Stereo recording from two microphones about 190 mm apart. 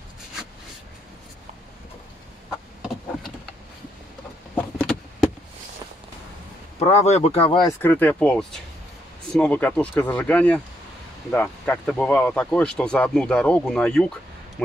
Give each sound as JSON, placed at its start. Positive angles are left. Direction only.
{"t": 4.7, "sound": "a sound", "side_deg": 5}
{"t": 6.8, "sound": "speech", "side_deg": 35}
{"t": 7.8, "sound": "speech", "side_deg": 10}